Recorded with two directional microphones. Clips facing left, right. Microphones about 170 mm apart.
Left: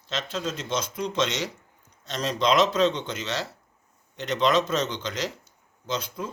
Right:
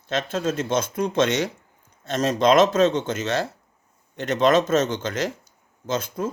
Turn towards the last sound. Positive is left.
turn(degrees=-50)  # may be behind; listen again after turning